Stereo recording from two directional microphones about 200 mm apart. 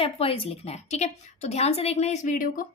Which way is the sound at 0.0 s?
30° left (ahead or behind).